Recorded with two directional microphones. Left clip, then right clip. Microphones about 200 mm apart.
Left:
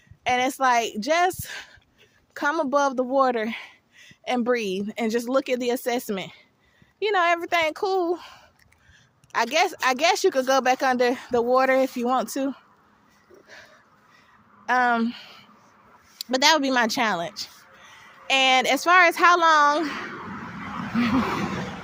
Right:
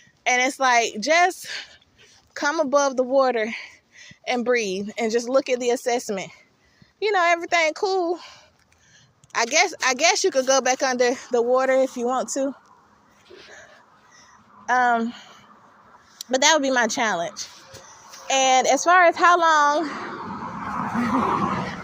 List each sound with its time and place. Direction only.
0.3 s speech: 25° left (ahead or behind)
14.7 s speech: 35° left (ahead or behind)
20.1 s vehicle: 25° left (ahead or behind)
21.2 s speech: 15° left (ahead or behind)